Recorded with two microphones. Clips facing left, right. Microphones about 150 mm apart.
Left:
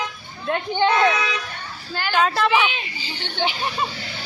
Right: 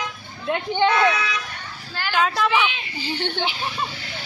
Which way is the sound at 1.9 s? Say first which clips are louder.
Left 2 dB; centre (ahead or behind).